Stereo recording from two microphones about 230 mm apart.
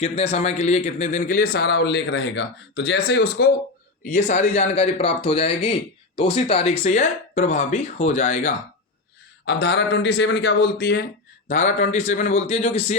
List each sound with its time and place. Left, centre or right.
0.0 s speech: left
4.0 s speech: left
9.5 s speech: left
11.4 s speech: left